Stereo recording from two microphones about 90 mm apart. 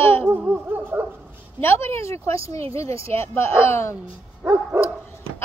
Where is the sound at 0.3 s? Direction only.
20° right (ahead or behind).